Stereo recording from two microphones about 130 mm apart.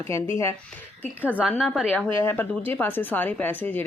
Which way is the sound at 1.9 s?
15° left (ahead or behind).